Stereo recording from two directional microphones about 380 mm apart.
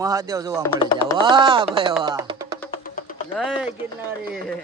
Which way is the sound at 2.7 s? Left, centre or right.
Left.